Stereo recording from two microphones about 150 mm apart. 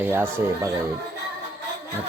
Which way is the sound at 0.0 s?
15° right (ahead or behind).